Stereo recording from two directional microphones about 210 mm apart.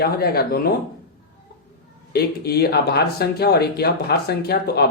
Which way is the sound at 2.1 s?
50° left (ahead or behind).